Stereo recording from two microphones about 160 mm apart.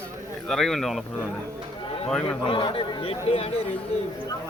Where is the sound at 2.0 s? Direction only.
5° left (ahead or behind).